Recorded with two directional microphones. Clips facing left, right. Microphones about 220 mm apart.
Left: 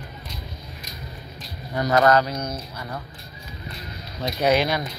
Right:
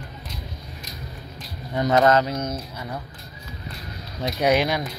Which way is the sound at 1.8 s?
25° right (ahead or behind).